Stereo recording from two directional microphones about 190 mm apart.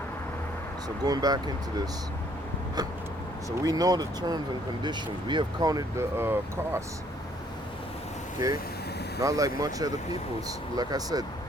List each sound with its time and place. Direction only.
1.0 s speech: 20° right (ahead or behind)
3.6 s speech: 20° right (ahead or behind)
8.4 s speech: 15° right (ahead or behind)